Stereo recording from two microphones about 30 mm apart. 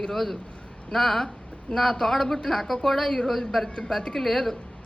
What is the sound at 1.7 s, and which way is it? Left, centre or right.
Speech, left.